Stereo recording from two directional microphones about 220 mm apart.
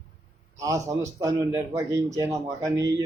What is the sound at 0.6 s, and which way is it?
A man's voice, 15° right (ahead or behind).